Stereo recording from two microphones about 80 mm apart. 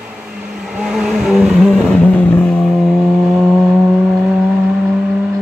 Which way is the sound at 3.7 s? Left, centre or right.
Centre.